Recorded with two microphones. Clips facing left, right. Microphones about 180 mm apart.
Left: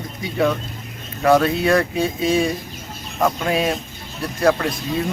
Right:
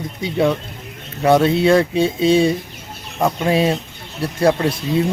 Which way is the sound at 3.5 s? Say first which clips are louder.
Right 4 dB; 25° right (ahead or behind).